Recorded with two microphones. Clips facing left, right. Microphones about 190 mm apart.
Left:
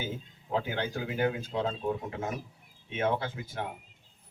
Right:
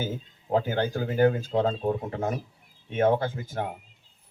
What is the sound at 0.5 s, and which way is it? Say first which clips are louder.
A man's voice: right 6 dB; 45° right (ahead or behind).